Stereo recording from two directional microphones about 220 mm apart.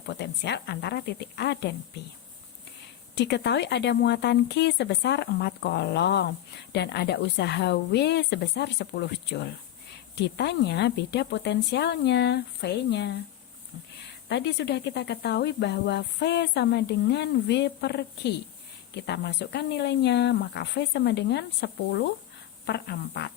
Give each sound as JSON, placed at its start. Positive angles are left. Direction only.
{"t": 0.1, "sound": "speech", "side_deg": 50}
{"t": 3.2, "sound": "speech", "side_deg": 50}
{"t": 14.3, "sound": "speech", "side_deg": 50}